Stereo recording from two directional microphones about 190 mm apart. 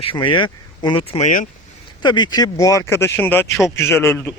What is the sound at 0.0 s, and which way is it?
A man's voice, 25° left (ahead or behind).